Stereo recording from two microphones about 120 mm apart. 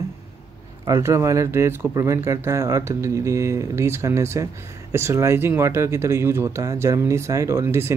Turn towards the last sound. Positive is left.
turn(degrees=-20)  # may be behind; listen again after turning